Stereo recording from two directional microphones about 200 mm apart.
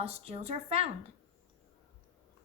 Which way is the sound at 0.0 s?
30° right (ahead or behind).